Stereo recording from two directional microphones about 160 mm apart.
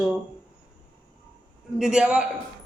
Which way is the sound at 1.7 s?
5° right (ahead or behind).